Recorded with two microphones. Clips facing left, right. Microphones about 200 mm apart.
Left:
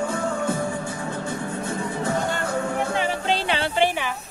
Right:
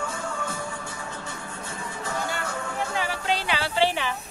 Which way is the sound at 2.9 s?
25° left (ahead or behind).